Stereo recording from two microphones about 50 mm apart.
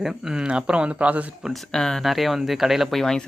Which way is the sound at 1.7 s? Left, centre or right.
Centre.